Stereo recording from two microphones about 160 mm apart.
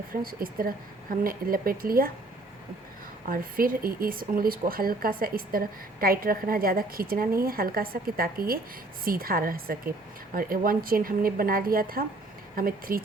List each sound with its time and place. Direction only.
0.1 s speech: 65° right (ahead or behind)
3.2 s speech: 60° right (ahead or behind)